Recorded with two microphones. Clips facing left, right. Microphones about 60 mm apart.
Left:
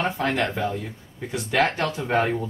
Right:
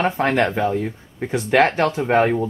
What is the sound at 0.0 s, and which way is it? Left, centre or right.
Speech, right.